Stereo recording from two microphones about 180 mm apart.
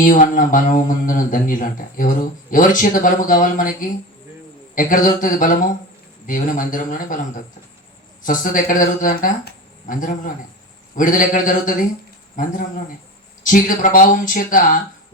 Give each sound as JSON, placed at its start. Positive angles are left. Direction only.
{"t": 0.0, "sound": "speech", "side_deg": 50}
{"t": 8.2, "sound": "speech", "side_deg": 50}